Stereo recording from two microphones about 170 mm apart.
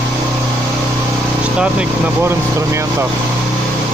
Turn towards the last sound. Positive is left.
turn(degrees=-15)  # may be behind; listen again after turning